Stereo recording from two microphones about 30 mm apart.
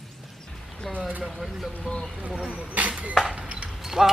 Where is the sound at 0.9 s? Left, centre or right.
Centre.